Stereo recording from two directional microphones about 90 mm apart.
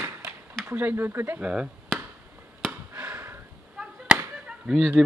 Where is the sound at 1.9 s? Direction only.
5° left (ahead or behind).